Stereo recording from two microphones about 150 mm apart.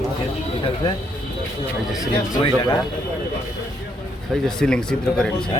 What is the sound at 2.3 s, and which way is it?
Speech, 25° left (ahead or behind).